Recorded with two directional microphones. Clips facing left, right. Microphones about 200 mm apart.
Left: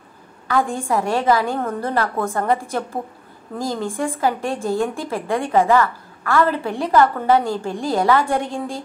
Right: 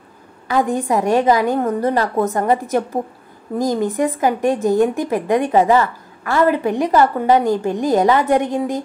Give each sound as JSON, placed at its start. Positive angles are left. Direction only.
{"t": 0.5, "sound": "a woman's voice", "side_deg": -20}